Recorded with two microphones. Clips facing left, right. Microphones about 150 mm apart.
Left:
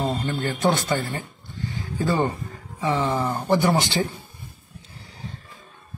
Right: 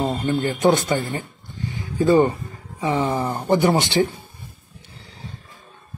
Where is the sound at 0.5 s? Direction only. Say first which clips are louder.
Right 3 dB; 15° right (ahead or behind).